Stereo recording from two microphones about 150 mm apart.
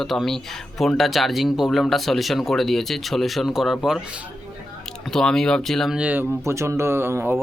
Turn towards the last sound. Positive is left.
turn(degrees=-15)  # may be behind; listen again after turning